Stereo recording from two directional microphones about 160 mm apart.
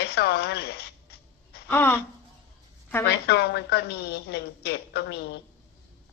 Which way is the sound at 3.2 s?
90° left.